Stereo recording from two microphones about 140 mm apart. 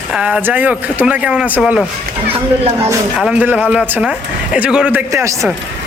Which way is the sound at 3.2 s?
10° right (ahead or behind).